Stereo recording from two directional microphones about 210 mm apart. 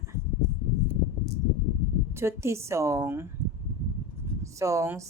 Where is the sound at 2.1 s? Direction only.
10° right (ahead or behind).